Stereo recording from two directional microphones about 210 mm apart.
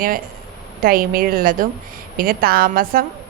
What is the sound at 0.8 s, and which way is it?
Speech, 45° right (ahead or behind).